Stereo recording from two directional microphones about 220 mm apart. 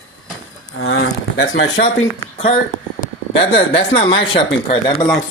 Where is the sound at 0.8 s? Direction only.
65° left (ahead or behind).